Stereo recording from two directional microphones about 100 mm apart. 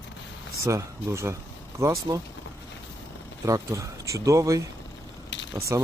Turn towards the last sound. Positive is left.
turn(degrees=-30)  # may be behind; listen again after turning